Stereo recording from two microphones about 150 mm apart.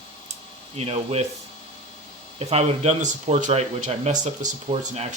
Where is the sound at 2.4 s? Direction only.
45° right (ahead or behind).